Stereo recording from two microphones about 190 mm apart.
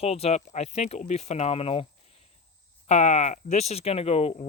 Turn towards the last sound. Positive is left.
turn(degrees=35)  # may be behind; listen again after turning